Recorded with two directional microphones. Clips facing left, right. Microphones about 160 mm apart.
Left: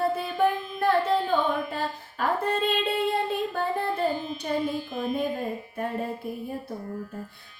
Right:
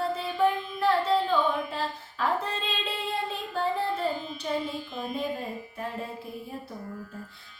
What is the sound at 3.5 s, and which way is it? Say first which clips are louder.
Music: left 1 dB; 50° left (ahead or behind).